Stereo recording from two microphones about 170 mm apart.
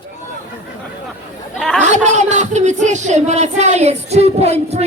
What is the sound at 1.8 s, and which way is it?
Speech, 45° right (ahead or behind).